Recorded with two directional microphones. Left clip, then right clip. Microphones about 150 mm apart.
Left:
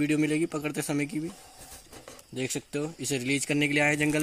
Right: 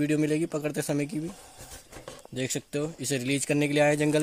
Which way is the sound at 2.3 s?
90° right.